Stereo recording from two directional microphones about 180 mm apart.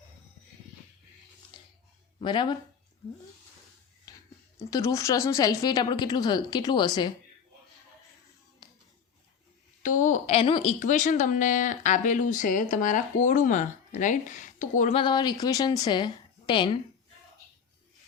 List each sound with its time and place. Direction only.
2.2 s speech: 25° left (ahead or behind)
4.1 s a sound: 20° left (ahead or behind)
4.5 s speech: 15° left (ahead or behind)
8.6 s a sound: 20° left (ahead or behind)
9.8 s speech: 45° left (ahead or behind)
14.9 s speech: 25° left (ahead or behind)